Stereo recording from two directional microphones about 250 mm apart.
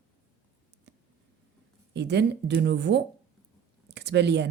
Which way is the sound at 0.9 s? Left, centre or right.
Right.